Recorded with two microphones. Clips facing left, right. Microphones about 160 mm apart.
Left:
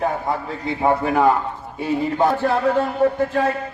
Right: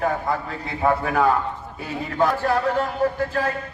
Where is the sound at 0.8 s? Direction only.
25° left (ahead or behind).